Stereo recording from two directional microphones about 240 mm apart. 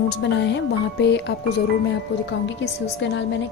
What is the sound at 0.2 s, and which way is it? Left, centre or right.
Speech, left.